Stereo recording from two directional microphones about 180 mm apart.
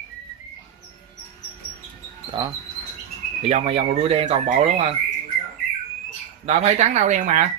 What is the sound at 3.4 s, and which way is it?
Speech, 35° right (ahead or behind).